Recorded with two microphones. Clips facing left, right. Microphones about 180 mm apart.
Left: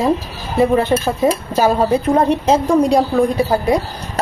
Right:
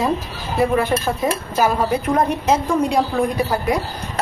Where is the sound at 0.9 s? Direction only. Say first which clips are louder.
Left 4 dB; 25° left (ahead or behind).